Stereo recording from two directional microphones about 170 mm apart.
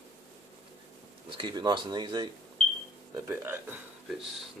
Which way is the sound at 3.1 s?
15° right (ahead or behind).